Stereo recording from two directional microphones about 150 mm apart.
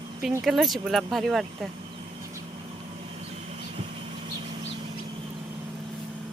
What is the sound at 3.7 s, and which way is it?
Vehicle, 40° right (ahead or behind).